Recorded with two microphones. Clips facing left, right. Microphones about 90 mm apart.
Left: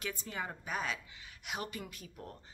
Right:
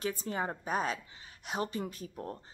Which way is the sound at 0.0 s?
35° right (ahead or behind).